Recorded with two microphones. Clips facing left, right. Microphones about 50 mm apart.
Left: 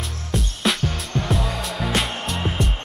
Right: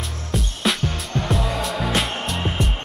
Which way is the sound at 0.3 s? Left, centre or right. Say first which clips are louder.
Even; centre.